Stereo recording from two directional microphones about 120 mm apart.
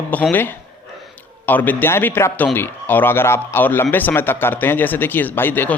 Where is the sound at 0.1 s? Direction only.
15° left (ahead or behind).